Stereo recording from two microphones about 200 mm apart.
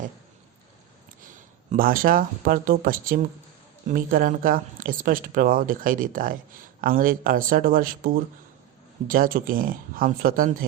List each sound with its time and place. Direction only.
1.7 s speech: 45° right (ahead or behind)